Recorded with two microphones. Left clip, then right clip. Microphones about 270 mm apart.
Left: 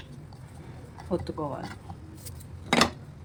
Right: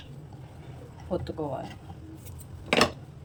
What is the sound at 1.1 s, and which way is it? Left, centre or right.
Speech, centre.